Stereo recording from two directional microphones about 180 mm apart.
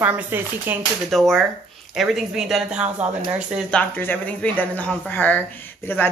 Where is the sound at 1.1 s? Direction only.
Centre (ahead or behind).